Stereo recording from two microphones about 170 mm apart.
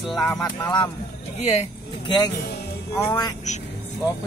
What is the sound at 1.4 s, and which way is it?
Speech, 40° left (ahead or behind).